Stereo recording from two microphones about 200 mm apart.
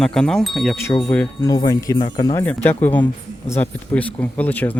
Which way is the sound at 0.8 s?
15° left (ahead or behind).